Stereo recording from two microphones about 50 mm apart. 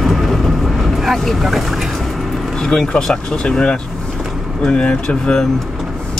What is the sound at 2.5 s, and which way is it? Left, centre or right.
Speech, centre.